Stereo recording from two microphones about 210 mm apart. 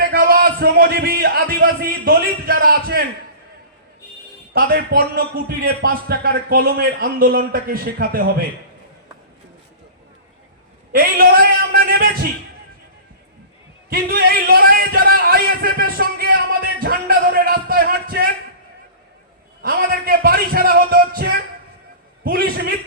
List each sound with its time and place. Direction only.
0.1 s a man's voice: 45° right (ahead or behind)
4.5 s a man's voice: 45° right (ahead or behind)
10.9 s a sound: 45° right (ahead or behind)
13.9 s speech: 45° right (ahead or behind)
19.6 s a man's voice: 45° right (ahead or behind)